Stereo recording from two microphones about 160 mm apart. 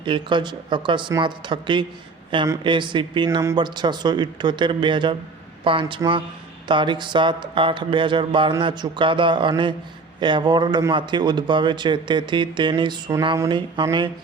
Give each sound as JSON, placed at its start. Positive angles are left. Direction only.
{"t": 0.0, "sound": "a man's voice", "side_deg": -30}